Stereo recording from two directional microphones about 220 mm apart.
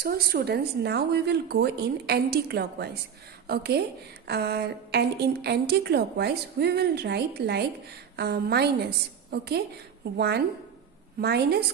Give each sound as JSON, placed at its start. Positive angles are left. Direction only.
{"t": 0.0, "sound": "a woman's voice", "side_deg": -45}